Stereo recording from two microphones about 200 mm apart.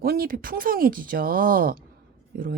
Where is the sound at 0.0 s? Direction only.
50° right (ahead or behind).